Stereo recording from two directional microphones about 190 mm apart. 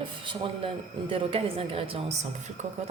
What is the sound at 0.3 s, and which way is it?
A man's voice, 30° right (ahead or behind).